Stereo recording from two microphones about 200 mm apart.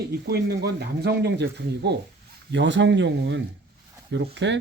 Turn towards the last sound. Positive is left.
turn(degrees=-60)  # may be behind; listen again after turning